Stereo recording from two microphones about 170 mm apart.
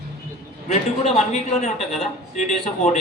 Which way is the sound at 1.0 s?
40° left (ahead or behind).